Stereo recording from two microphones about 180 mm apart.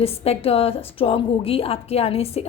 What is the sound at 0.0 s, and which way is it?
A woman's voice, 35° left (ahead or behind).